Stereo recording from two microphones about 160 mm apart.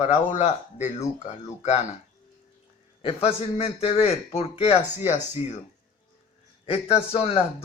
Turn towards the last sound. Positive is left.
turn(degrees=35)  # may be behind; listen again after turning